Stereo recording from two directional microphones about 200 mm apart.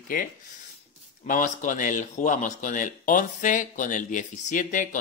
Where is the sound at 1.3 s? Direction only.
40° left (ahead or behind).